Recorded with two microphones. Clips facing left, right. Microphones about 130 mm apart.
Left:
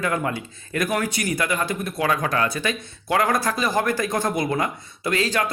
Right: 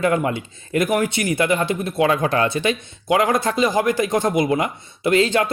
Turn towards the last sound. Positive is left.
turn(degrees=-25)  # may be behind; listen again after turning